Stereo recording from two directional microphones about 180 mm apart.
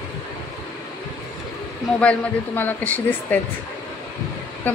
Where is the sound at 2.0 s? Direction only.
10° left (ahead or behind).